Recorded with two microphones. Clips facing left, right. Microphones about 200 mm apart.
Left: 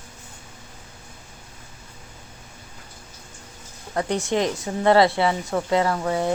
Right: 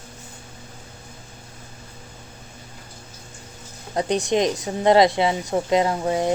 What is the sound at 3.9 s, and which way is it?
Speech, 15° right (ahead or behind).